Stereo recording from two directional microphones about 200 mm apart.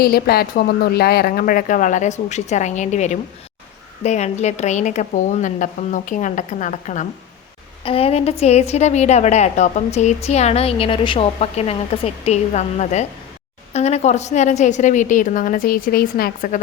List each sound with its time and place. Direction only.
0.0 s a woman's voice: 50° left (ahead or behind)